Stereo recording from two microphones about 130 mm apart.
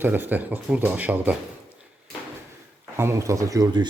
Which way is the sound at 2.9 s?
20° right (ahead or behind).